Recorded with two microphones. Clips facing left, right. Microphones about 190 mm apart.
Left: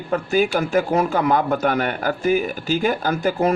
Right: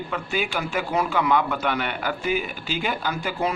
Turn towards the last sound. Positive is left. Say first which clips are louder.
# left 6 dB
turn(degrees=45)  # may be behind; listen again after turning